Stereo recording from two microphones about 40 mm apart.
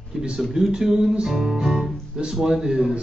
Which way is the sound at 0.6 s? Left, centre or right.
Centre.